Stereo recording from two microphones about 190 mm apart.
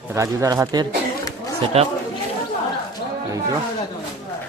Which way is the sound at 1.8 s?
35° right (ahead or behind).